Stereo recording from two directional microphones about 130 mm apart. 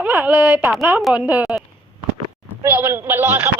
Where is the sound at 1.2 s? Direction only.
10° right (ahead or behind).